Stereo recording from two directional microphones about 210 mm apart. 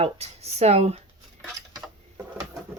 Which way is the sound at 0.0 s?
30° right (ahead or behind).